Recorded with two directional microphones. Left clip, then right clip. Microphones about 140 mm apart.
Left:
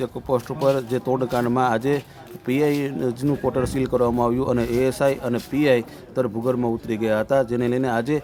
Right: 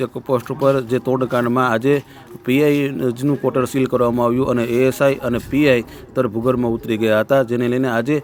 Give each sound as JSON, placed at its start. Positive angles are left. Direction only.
{"t": 0.0, "sound": "speech", "side_deg": -15}